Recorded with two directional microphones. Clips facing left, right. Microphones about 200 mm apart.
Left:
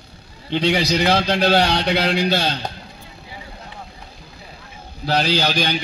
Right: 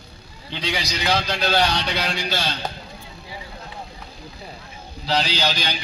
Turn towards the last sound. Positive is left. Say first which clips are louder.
# left 5 dB
turn(degrees=50)  # may be behind; listen again after turning